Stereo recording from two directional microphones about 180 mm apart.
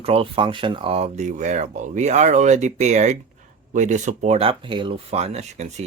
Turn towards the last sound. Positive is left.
turn(degrees=-40)  # may be behind; listen again after turning